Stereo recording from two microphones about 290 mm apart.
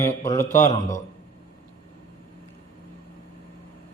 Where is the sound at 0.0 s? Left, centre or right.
Centre.